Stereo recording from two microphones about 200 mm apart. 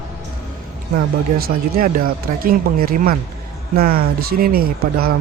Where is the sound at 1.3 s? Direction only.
45° right (ahead or behind).